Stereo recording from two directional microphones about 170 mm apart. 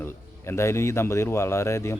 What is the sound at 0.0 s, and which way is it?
Speech, 15° left (ahead or behind).